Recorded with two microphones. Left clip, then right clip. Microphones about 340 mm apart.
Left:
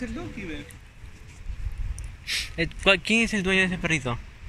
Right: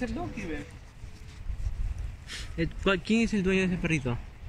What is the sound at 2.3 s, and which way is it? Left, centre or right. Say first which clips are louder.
A man's voice: left 7 dB; centre.